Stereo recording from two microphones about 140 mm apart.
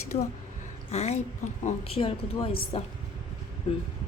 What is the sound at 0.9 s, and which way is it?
A woman's voice, 50° left (ahead or behind).